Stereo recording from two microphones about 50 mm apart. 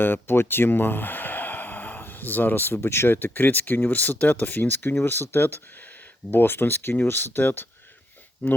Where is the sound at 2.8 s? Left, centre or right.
Left.